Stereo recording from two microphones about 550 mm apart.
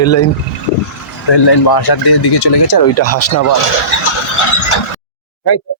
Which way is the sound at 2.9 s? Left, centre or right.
Left.